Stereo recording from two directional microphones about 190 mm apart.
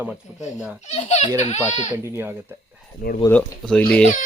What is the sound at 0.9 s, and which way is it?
Speech, 35° left (ahead or behind).